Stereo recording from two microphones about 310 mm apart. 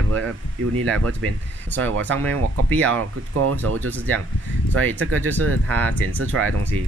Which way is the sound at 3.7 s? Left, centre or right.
Right.